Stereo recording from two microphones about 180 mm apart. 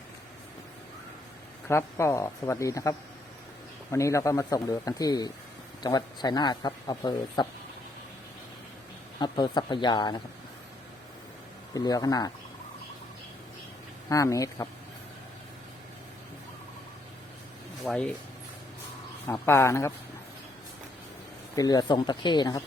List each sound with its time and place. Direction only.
1.6 s speech: 15° left (ahead or behind)
3.9 s speech: 15° left (ahead or behind)
9.1 s speech: 25° left (ahead or behind)
11.7 s speech: 20° left (ahead or behind)
14.1 s speech: 20° left (ahead or behind)
17.8 s speech: 5° left (ahead or behind)
19.3 s speech: 15° left (ahead or behind)
21.5 s speech: 20° left (ahead or behind)